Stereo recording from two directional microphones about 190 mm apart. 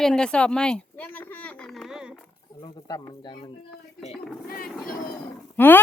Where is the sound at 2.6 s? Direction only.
25° left (ahead or behind).